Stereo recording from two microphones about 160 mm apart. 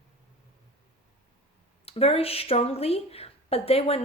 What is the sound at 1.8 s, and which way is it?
A woman's voice, 40° left (ahead or behind).